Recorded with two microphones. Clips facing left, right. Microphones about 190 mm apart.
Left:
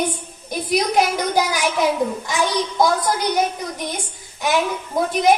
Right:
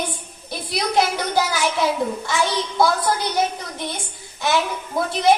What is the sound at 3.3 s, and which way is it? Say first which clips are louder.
A woman's voice: left 2 dB; 15° left (ahead or behind).